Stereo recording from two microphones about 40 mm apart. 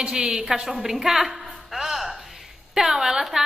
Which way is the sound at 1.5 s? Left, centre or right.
Centre.